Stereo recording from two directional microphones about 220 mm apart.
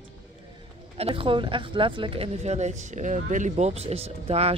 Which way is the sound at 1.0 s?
25° right (ahead or behind).